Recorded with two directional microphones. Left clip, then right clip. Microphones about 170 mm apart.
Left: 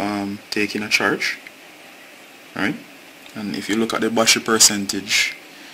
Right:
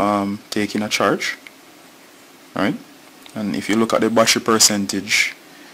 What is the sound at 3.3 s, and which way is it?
Speech, 45° right (ahead or behind).